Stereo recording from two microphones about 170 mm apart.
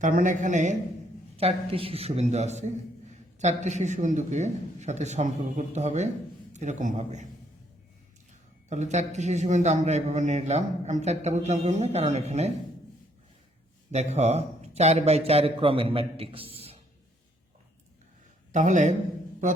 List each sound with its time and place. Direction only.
0.0 s a man's voice: 50° right (ahead or behind)
1.4 s a man's voice: 35° right (ahead or behind)
8.3 s a man's voice: 45° right (ahead or behind)
13.9 s a man's voice: 40° right (ahead or behind)
18.5 s a man's voice: 45° right (ahead or behind)